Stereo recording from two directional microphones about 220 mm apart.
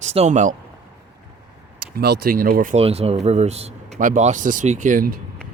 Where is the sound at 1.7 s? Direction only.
45° right (ahead or behind).